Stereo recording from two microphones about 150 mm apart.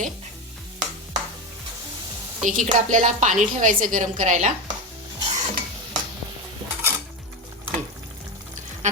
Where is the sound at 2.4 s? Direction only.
55° right (ahead or behind).